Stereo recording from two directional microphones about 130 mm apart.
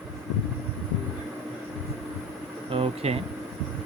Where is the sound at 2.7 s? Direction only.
50° right (ahead or behind).